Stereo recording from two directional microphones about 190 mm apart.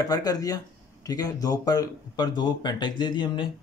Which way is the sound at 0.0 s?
20° left (ahead or behind).